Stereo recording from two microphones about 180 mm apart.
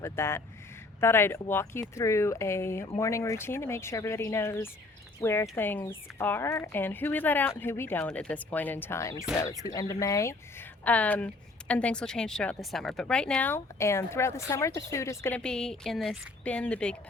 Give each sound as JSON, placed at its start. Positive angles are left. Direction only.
{"t": 0.0, "sound": "a woman's voice", "side_deg": 15}